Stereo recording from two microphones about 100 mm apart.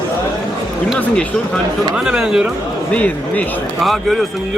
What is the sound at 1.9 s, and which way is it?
Speech, 10° right (ahead or behind).